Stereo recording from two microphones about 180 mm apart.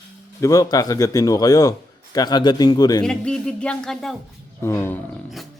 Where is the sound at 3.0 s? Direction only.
5° left (ahead or behind).